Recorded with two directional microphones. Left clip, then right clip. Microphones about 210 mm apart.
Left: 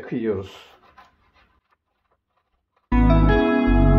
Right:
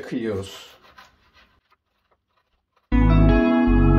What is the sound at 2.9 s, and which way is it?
Music, 40° left (ahead or behind).